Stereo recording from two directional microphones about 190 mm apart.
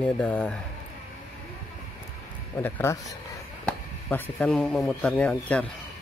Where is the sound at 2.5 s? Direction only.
15° left (ahead or behind).